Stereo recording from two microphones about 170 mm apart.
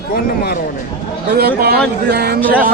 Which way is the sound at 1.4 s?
70° right (ahead or behind).